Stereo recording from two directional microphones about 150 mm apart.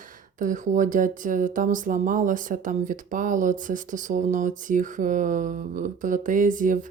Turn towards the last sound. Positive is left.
turn(degrees=-60)  # may be behind; listen again after turning